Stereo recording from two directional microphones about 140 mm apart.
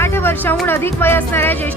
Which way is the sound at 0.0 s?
15° left (ahead or behind).